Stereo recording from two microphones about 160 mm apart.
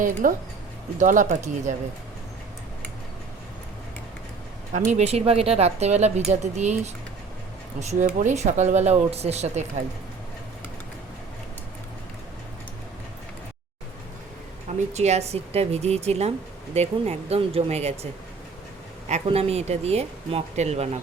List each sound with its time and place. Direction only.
0.0 s speech: 55° right (ahead or behind)
4.7 s speech: 45° right (ahead or behind)
14.9 s speech: 45° right (ahead or behind)